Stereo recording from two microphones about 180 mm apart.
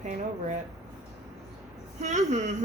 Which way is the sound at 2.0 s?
40° right (ahead or behind).